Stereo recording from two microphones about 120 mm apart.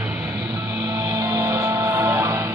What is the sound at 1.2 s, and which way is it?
Music, 25° right (ahead or behind).